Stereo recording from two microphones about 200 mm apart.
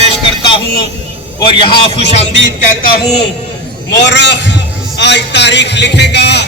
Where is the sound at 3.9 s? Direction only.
60° left (ahead or behind).